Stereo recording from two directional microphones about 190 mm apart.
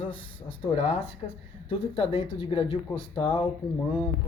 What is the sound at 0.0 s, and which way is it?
Speech, 30° left (ahead or behind).